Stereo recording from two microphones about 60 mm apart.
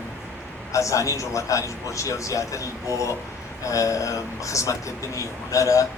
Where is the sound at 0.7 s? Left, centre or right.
Left.